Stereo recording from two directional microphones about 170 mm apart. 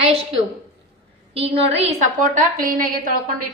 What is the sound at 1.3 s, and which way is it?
A woman's voice, 35° right (ahead or behind).